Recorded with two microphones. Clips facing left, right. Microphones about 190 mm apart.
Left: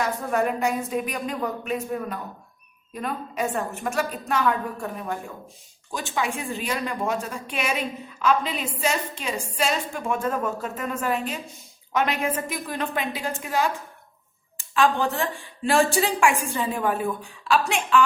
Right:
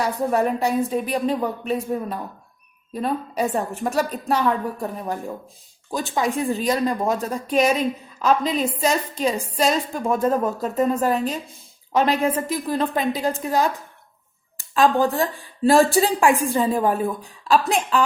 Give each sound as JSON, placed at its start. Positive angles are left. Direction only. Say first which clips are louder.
{"t": 0.0, "sound": "a woman's voice", "louder": "right 3 dB", "side_deg": -35}
{"t": 14.8, "sound": "a woman's voice", "louder": "right 4 dB", "side_deg": -35}